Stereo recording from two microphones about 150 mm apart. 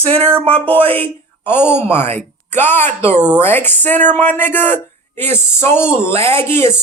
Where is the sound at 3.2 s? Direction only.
5° right (ahead or behind).